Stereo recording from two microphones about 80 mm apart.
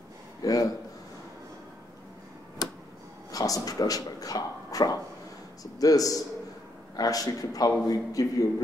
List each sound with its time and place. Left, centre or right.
0.4 s a sound: left
2.6 s tick-tock: left
3.3 s a man's voice: left